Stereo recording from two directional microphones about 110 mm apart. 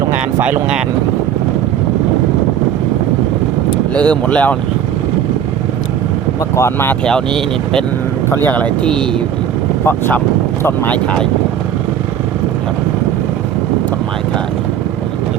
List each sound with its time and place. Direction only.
0.3 s speech: 20° right (ahead or behind)
3.9 s speech: 10° left (ahead or behind)
6.6 s speech: 20° left (ahead or behind)
7.0 s speech: 5° left (ahead or behind)
10.6 s speech: 20° left (ahead or behind)